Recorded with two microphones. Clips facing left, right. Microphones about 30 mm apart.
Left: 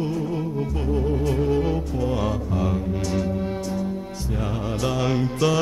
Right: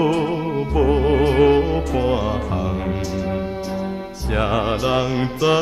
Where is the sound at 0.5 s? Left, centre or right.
Right.